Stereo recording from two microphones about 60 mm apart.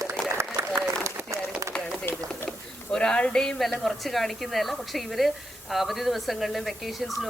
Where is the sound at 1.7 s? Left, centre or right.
Left.